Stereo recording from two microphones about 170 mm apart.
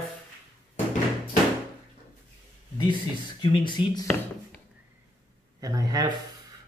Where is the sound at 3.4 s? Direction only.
30° left (ahead or behind).